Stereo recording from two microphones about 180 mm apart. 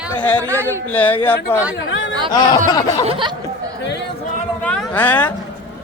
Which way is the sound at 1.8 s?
90° left.